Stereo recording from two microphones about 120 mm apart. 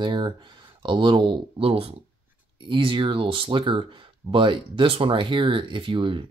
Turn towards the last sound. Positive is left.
turn(degrees=-45)  # may be behind; listen again after turning